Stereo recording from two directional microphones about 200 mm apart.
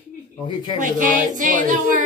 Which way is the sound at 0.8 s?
40° right (ahead or behind).